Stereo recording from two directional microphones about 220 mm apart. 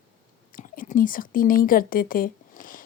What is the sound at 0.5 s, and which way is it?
Speech, 40° left (ahead or behind).